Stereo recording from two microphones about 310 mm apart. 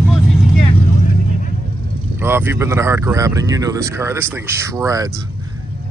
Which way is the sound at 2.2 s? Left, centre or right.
Centre.